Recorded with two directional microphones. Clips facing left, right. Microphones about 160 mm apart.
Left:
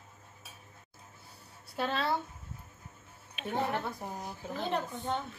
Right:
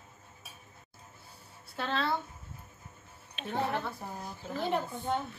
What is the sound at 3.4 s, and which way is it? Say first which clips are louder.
A woman's voice: even; 10° left (ahead or behind).